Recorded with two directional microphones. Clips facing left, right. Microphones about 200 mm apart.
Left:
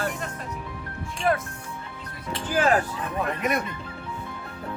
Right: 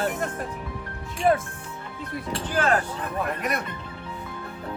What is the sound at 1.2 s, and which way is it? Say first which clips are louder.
Speech: right 3 dB; 25° right (ahead or behind).